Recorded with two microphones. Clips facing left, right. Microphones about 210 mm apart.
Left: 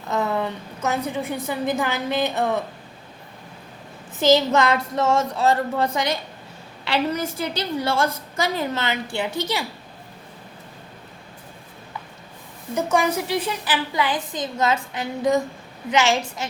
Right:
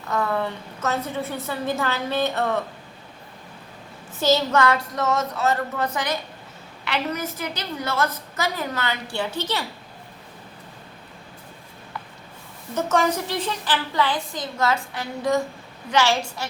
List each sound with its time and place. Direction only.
0.1 s a woman's voice: 20° left (ahead or behind)
4.2 s a woman's voice: 20° left (ahead or behind)
12.7 s a woman's voice: 10° left (ahead or behind)